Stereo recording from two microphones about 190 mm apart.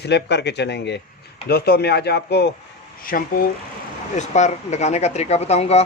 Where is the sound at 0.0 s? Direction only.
60° left (ahead or behind).